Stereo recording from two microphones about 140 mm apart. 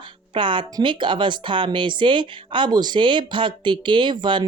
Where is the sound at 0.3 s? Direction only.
35° right (ahead or behind).